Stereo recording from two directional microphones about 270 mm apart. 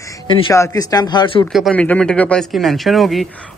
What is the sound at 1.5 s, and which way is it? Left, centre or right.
Speech, centre.